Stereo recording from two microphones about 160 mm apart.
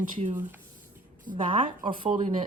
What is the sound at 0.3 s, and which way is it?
Speech, 10° right (ahead or behind).